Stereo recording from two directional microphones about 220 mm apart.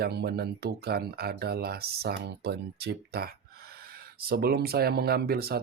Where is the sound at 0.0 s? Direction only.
45° right (ahead or behind).